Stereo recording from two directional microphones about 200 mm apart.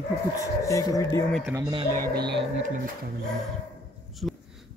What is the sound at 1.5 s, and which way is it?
Speech, 20° right (ahead or behind).